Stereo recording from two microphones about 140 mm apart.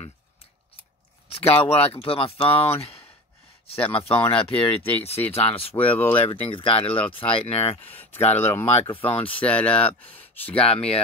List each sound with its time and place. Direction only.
1.3 s speech: 45° left (ahead or behind)
5.8 s speech: 10° left (ahead or behind)
6.4 s speech: 40° left (ahead or behind)
7.9 s speech: 15° left (ahead or behind)
8.9 s speech: 40° left (ahead or behind)
9.4 s speech: 10° left (ahead or behind)
10.5 s speech: 45° left (ahead or behind)